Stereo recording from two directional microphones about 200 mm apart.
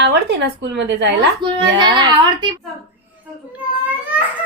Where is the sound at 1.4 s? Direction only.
25° right (ahead or behind).